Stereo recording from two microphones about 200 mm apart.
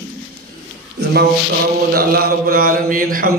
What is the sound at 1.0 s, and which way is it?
Speech, 55° right (ahead or behind).